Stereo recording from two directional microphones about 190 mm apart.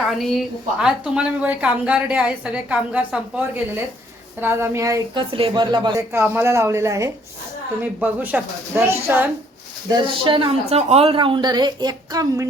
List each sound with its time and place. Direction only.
0.2 s a woman's voice: centre (ahead or behind)
9.9 s speech: 25° right (ahead or behind)